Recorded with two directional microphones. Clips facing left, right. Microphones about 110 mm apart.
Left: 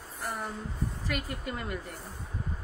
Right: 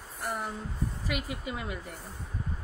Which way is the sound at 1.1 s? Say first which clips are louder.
Even; 5° right (ahead or behind).